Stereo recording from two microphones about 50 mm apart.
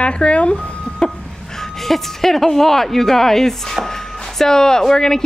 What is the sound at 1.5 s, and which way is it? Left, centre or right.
Speech, centre.